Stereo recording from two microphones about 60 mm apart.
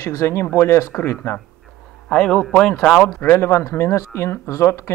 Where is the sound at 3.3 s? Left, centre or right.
Left.